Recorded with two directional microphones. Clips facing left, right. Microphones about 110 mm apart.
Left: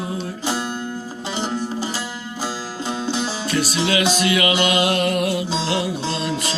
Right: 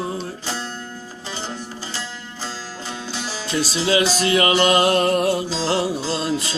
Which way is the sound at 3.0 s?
20° left (ahead or behind).